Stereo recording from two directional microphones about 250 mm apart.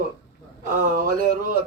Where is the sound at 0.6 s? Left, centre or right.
Right.